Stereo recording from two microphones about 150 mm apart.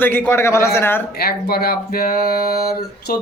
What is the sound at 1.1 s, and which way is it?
Speech, 90° left.